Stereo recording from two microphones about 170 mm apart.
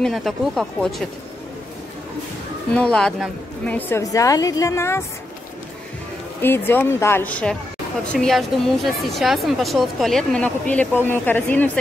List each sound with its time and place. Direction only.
0.0 s a woman's voice: centre (ahead or behind)
2.7 s a woman's voice: 5° left (ahead or behind)
3.7 s a woman's voice: 15° left (ahead or behind)
6.4 s a woman's voice: 10° left (ahead or behind)